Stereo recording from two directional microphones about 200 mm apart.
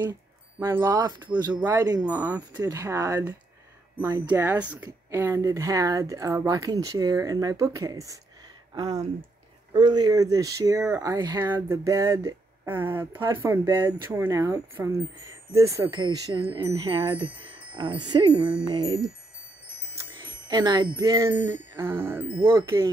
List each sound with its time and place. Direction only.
0.6 s speech: 10° right (ahead or behind)
20.2 s speech: 20° right (ahead or behind)
21.8 s speech: 10° right (ahead or behind)